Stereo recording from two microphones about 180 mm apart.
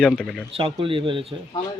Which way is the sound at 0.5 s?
30° right (ahead or behind).